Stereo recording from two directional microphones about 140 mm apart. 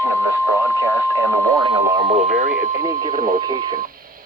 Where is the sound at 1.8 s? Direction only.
30° right (ahead or behind).